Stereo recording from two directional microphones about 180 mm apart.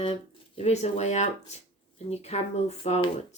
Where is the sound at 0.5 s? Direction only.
40° left (ahead or behind).